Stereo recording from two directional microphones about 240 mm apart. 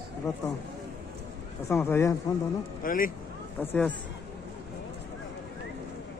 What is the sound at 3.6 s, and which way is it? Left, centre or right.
Speech, centre.